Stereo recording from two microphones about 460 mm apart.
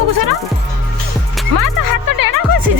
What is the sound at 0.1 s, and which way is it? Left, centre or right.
Speech, right.